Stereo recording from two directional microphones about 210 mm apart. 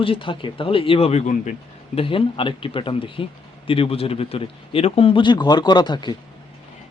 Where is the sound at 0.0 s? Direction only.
25° left (ahead or behind).